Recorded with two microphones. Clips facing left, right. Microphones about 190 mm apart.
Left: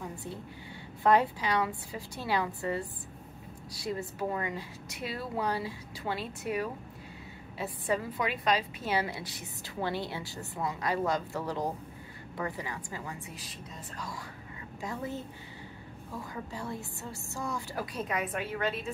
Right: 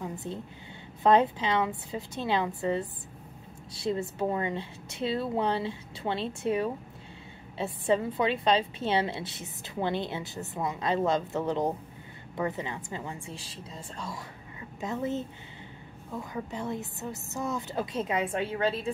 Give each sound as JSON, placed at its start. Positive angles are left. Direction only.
{"t": 0.0, "sound": "a sound", "side_deg": -20}
{"t": 1.0, "sound": "a woman's voice", "side_deg": -20}
{"t": 16.5, "sound": "a woman's voice", "side_deg": -20}